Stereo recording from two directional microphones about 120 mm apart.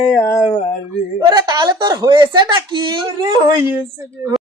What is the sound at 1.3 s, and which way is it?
Speech, 35° right (ahead or behind).